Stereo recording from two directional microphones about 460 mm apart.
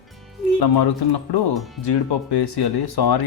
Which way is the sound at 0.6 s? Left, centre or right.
Left.